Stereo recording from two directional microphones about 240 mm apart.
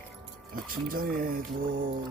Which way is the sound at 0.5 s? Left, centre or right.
Right.